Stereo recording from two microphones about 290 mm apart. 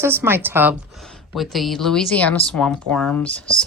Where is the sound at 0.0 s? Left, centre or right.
Centre.